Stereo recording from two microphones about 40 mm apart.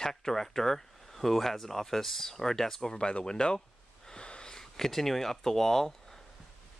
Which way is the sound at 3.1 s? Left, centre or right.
Centre.